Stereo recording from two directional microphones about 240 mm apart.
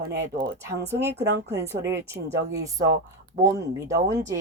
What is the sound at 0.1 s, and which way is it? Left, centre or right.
Speech, centre.